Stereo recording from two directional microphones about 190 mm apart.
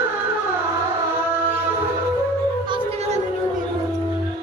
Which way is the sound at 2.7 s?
30° right (ahead or behind).